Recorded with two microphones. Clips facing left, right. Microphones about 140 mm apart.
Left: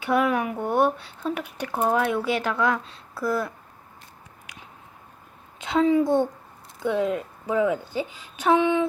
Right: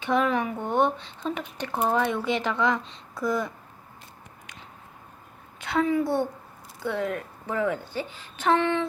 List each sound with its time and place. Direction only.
0.0 s speech: 10° left (ahead or behind)
4.5 s a sound: 10° left (ahead or behind)
5.5 s a woman's voice: 20° left (ahead or behind)